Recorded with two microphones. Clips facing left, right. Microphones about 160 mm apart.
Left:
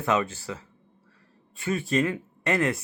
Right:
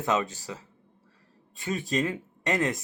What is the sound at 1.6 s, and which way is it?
Speech, 20° right (ahead or behind).